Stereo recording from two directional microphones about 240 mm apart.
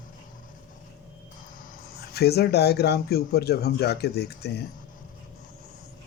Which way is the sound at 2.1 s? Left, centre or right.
Left.